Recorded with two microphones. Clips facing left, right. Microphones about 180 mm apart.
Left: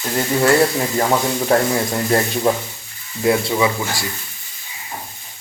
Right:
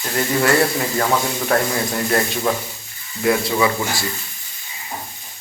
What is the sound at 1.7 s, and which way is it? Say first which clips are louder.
Speech: left 2 dB; 20° left (ahead or behind).